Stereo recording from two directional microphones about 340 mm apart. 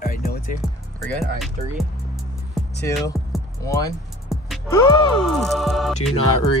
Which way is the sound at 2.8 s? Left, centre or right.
Centre.